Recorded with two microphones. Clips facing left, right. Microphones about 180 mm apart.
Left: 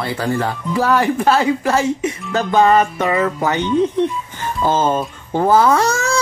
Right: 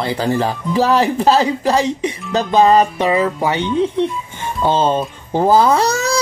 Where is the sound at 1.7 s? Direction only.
15° right (ahead or behind).